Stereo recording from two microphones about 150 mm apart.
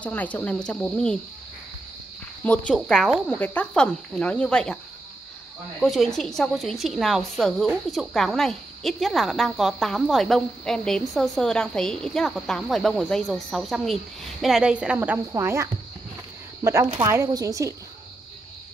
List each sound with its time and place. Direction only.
0.0 s speech: 10° left (ahead or behind)
2.4 s speech: 10° left (ahead or behind)
2.7 s a woman's voice: centre (ahead or behind)
5.8 s a woman's voice: centre (ahead or behind); by 17.7 s 20° right (ahead or behind)